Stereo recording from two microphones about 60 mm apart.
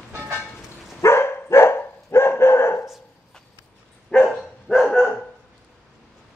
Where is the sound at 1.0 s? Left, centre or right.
Left.